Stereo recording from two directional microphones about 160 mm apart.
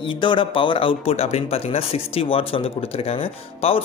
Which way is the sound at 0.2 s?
30° left (ahead or behind).